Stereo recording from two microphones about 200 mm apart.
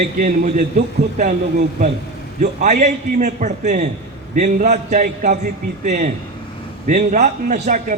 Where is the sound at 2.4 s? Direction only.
35° right (ahead or behind).